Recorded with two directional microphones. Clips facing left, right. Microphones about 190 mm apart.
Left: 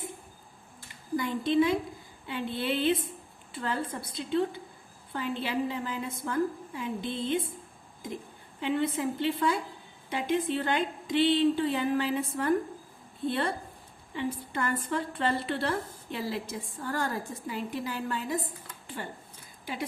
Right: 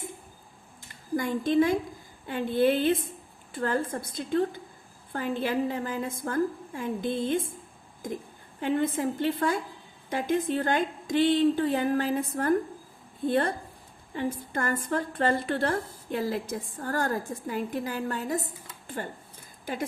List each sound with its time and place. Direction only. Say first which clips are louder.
1.1 s a woman's voice: right 2 dB; 45° right (ahead or behind)
8.6 s a woman's voice: right 2 dB; 45° right (ahead or behind)